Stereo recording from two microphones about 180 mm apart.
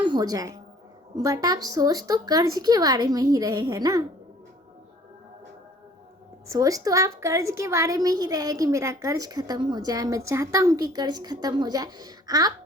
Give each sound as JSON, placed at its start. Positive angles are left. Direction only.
{"t": 0.0, "sound": "a woman's voice", "side_deg": -25}
{"t": 6.5, "sound": "a woman's voice", "side_deg": -20}